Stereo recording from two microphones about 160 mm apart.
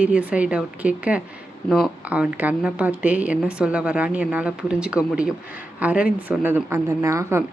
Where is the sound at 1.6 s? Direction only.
Centre (ahead or behind).